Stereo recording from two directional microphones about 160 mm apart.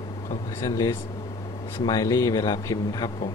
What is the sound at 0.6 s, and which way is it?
Speech, 20° left (ahead or behind).